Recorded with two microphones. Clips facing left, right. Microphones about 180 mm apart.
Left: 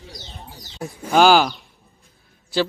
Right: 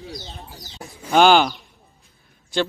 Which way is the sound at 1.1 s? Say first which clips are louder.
Even; centre (ahead or behind).